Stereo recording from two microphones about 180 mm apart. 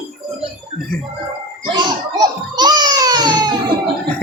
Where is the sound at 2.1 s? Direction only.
25° right (ahead or behind).